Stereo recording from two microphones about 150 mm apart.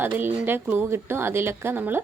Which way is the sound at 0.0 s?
15° right (ahead or behind).